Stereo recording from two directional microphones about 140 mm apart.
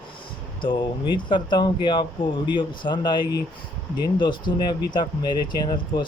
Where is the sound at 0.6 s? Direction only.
35° left (ahead or behind).